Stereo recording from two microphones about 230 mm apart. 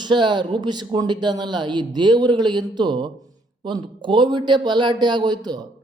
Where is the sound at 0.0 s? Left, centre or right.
Centre.